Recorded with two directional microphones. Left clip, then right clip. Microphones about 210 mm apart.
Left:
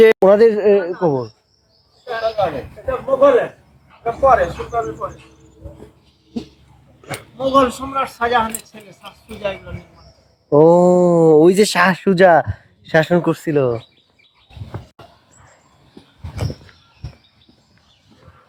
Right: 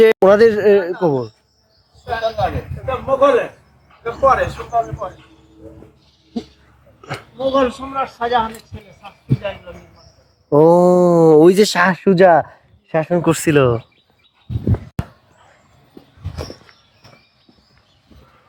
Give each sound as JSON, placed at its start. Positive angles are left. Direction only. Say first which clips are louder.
{"t": 0.0, "sound": "a sound", "louder": "left 1 dB", "side_deg": 0}
{"t": 0.3, "sound": "speech", "louder": "right 1 dB", "side_deg": -15}
{"t": 2.8, "sound": "speech", "louder": "left 1 dB", "side_deg": -50}
{"t": 7.3, "sound": "speech", "louder": "left 2 dB", "side_deg": 55}
{"t": 10.5, "sound": "speech", "louder": "even", "side_deg": -10}
{"t": 12.8, "sound": "speech", "louder": "left 3 dB", "side_deg": 0}
{"t": 13.3, "sound": "speech", "louder": "right 3 dB", "side_deg": -30}